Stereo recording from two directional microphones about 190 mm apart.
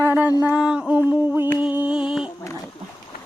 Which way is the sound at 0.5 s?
5° right (ahead or behind).